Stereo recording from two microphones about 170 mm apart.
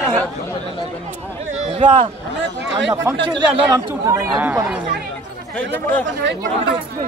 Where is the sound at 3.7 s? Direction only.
20° right (ahead or behind).